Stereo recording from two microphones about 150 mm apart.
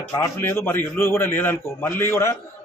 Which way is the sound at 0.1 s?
15° left (ahead or behind).